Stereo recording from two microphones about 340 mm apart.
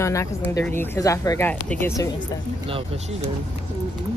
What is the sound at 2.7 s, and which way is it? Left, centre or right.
Speech, centre.